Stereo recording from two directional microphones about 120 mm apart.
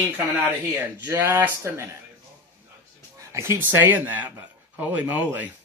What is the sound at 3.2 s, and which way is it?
Speech, 25° right (ahead or behind).